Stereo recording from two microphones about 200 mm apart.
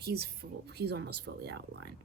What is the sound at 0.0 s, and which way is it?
Speech, 55° right (ahead or behind).